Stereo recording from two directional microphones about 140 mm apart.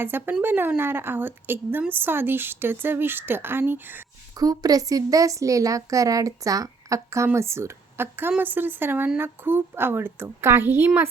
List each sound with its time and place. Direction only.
0.0 s a woman's voice: 15° right (ahead or behind)
4.4 s a woman's voice: 25° right (ahead or behind)